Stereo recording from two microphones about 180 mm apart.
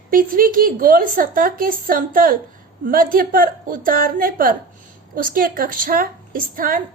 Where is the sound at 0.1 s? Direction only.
50° right (ahead or behind).